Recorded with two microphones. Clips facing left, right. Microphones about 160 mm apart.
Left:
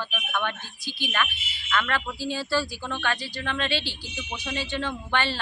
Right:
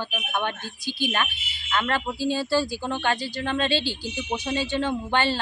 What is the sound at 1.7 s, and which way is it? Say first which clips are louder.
A woman's voice: right 2 dB; 30° right (ahead or behind).